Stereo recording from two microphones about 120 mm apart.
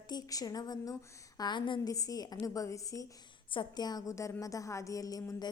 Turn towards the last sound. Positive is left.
turn(degrees=35)  # may be behind; listen again after turning